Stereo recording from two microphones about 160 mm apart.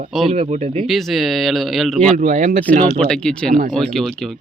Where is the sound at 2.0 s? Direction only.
50° right (ahead or behind).